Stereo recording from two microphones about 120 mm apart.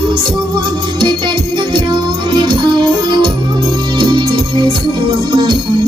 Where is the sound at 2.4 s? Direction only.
40° right (ahead or behind).